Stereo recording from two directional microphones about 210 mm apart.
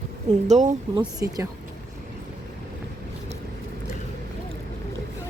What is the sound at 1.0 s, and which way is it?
Speech, 15° right (ahead or behind).